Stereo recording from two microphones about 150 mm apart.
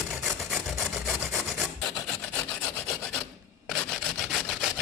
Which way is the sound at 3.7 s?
Centre (ahead or behind).